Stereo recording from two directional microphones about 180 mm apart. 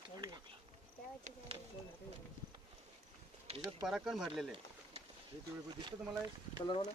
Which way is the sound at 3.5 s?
20° right (ahead or behind).